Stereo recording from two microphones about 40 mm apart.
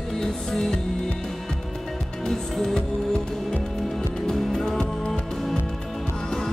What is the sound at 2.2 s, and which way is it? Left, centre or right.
Music, centre.